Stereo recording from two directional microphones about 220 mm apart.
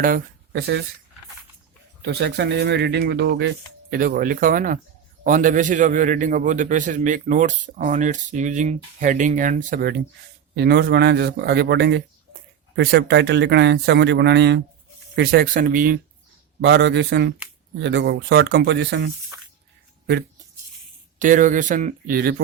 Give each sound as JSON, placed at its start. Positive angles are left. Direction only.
{"t": 0.0, "sound": "speech", "side_deg": -45}
{"t": 2.0, "sound": "a man's voice", "side_deg": -50}
{"t": 10.5, "sound": "a man's voice", "side_deg": -50}
{"t": 16.6, "sound": "speech", "side_deg": -50}
{"t": 21.2, "sound": "a man's voice", "side_deg": -35}